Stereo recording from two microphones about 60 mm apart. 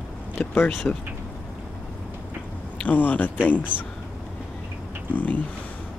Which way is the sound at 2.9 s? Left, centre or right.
Left.